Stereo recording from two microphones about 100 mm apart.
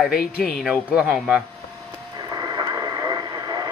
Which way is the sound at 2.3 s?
40° right (ahead or behind).